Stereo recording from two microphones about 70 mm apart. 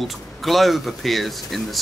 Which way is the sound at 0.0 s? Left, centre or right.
Centre.